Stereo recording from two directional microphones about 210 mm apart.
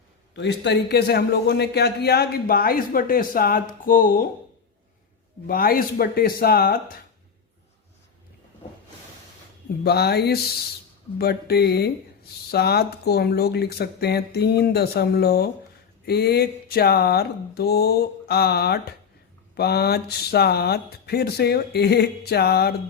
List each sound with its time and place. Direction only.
0.3 s a man's voice: 55° left (ahead or behind)
5.5 s a man's voice: 45° left (ahead or behind)
9.8 s a man's voice: 50° left (ahead or behind)